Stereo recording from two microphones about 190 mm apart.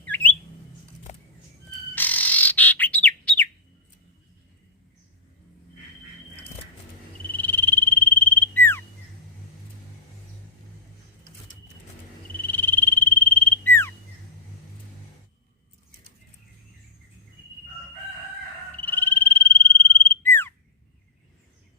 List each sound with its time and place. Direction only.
0.0 s a sound: 10° left (ahead or behind)
1.1 s a sound: 40° left (ahead or behind)
2.0 s bird: 10° left (ahead or behind)
7.3 s frog: 10° left (ahead or behind)
12.4 s frog: 10° left (ahead or behind)
18.8 s frog: 10° left (ahead or behind)